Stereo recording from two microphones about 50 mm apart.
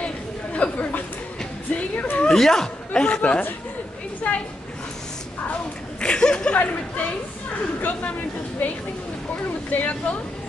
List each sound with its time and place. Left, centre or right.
0.0 s chatter: left
1.7 s music: left
2.2 s speech: centre
4.2 s a sound: left
5.9 s a sound: centre
6.5 s speech: left
9.7 s speech: left